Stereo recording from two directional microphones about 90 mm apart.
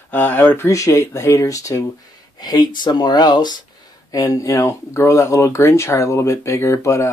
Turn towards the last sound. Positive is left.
turn(degrees=35)  # may be behind; listen again after turning